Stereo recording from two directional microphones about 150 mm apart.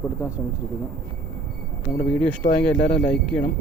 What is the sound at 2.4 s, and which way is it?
Speech, 50° left (ahead or behind).